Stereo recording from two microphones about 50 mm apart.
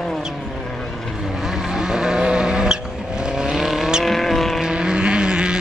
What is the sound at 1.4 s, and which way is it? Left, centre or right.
Vehicle, centre.